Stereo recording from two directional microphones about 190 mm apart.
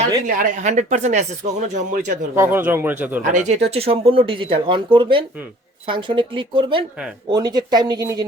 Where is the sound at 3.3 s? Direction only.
35° right (ahead or behind).